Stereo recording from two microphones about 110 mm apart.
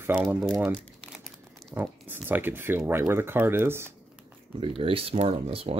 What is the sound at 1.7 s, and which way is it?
Speech, 15° right (ahead or behind).